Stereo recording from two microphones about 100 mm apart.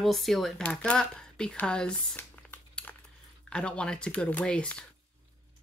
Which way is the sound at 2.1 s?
15° left (ahead or behind).